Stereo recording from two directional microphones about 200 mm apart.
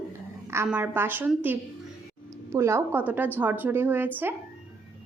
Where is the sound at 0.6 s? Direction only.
10° right (ahead or behind).